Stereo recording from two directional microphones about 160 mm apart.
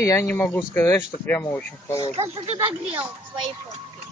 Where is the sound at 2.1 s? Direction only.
40° right (ahead or behind).